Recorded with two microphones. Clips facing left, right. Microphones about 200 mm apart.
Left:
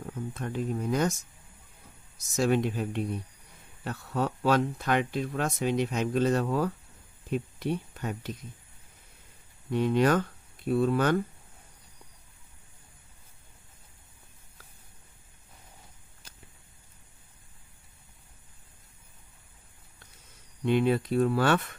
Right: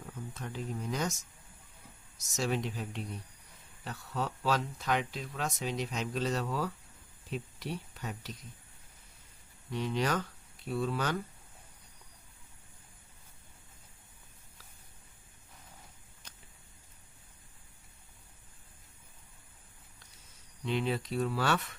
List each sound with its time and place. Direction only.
0.0 s speech: 55° left (ahead or behind)
2.1 s speech: 55° left (ahead or behind)
9.7 s speech: 55° left (ahead or behind)
20.7 s speech: 55° left (ahead or behind)